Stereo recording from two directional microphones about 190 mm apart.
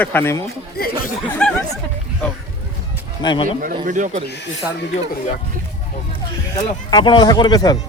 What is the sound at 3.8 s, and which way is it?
Speech, 40° right (ahead or behind).